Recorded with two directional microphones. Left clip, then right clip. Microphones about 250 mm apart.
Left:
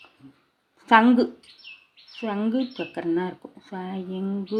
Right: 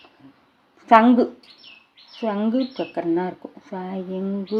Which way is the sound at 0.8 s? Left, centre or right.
Centre.